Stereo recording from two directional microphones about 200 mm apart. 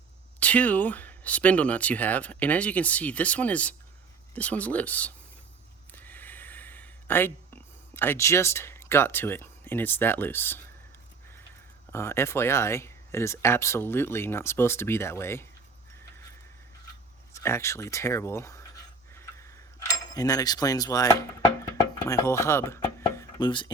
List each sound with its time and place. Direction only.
0.3 s speech: 5° left (ahead or behind)
5.9 s gasp: 10° left (ahead or behind)
11.9 s speech: 15° left (ahead or behind)
17.3 s speech: 15° left (ahead or behind)
19.1 s cutlery: 15° left (ahead or behind)
21.6 s a sound: 15° left (ahead or behind)